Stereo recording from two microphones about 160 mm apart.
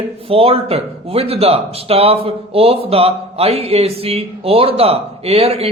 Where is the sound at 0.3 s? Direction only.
40° right (ahead or behind).